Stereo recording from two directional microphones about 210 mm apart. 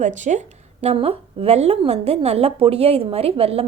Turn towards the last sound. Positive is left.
turn(degrees=-30)  # may be behind; listen again after turning